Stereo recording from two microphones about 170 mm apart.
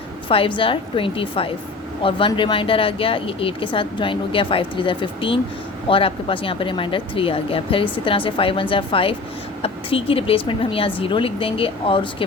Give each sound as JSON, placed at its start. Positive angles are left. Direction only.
{"t": 0.3, "sound": "speech", "side_deg": 30}